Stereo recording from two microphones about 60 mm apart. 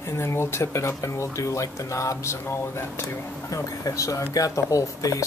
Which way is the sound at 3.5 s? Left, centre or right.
Left.